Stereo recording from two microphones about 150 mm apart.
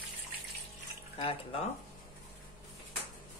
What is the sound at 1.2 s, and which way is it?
Speech, 40° left (ahead or behind).